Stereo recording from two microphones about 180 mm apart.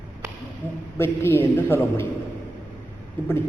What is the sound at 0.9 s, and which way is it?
A man's voice, 15° left (ahead or behind).